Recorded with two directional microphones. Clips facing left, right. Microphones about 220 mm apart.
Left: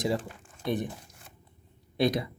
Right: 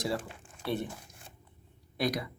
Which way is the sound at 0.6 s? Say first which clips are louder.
Left 3 dB; 15° left (ahead or behind).